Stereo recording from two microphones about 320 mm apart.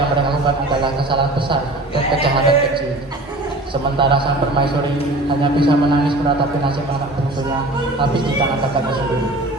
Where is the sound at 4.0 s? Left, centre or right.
Centre.